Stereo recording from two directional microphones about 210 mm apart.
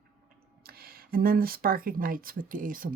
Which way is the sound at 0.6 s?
45° right (ahead or behind).